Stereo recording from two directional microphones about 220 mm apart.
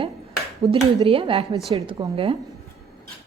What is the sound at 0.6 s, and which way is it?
Speech, 25° right (ahead or behind).